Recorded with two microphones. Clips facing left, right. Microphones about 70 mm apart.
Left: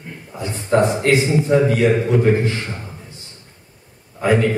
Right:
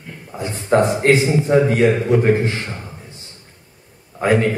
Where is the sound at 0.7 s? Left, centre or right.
Right.